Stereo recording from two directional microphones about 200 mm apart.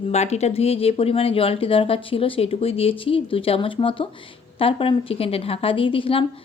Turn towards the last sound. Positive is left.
turn(degrees=25)  # may be behind; listen again after turning